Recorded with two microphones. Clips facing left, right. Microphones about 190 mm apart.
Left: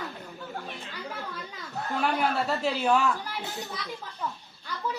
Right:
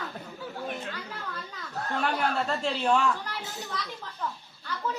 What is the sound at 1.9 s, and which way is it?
Speech, 5° left (ahead or behind).